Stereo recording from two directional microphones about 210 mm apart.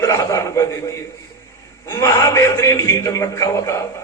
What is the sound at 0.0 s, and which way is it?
A man's voice, 15° left (ahead or behind).